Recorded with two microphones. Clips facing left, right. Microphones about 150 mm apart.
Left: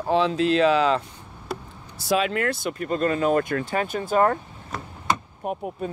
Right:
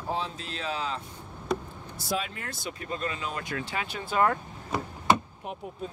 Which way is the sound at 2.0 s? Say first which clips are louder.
Left 10 dB; 85° left.